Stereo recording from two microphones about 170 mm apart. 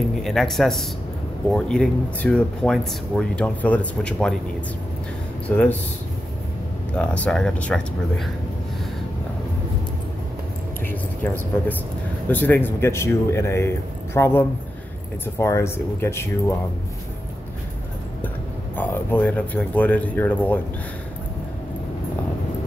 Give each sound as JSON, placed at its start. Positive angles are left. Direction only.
{"t": 0.2, "sound": "speech", "side_deg": 0}
{"t": 5.5, "sound": "speech", "side_deg": 10}
{"t": 7.0, "sound": "speech", "side_deg": 5}
{"t": 10.9, "sound": "a sound", "side_deg": 10}
{"t": 12.3, "sound": "speech", "side_deg": 10}
{"t": 18.8, "sound": "speech", "side_deg": 10}